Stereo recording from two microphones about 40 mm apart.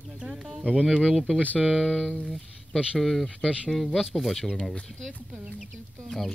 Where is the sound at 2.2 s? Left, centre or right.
Centre.